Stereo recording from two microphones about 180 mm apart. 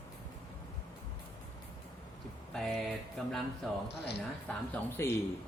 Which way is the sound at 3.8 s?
65° left (ahead or behind).